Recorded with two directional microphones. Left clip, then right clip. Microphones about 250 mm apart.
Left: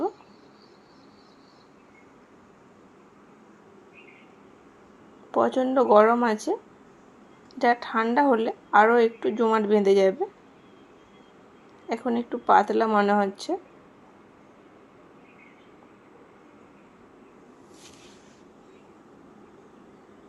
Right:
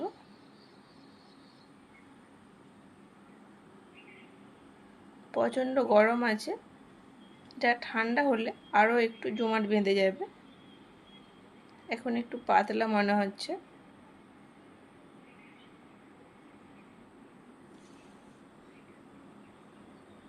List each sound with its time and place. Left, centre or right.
5.3 s a woman's voice: centre
7.6 s a woman's voice: centre
11.9 s a woman's voice: centre